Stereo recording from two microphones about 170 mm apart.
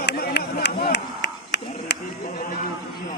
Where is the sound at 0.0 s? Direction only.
70° left (ahead or behind).